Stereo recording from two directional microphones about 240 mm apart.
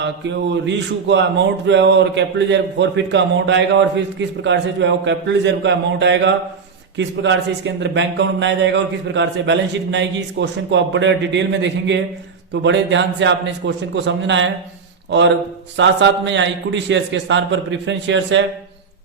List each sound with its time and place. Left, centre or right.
0.5 s speech: right
15.8 s speech: right